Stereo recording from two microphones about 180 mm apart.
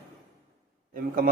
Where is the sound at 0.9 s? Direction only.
50° right (ahead or behind).